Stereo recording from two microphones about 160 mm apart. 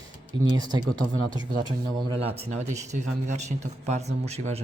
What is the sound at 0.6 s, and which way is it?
Speech, 25° right (ahead or behind).